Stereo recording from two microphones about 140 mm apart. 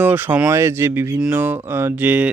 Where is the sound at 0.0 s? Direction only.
15° right (ahead or behind).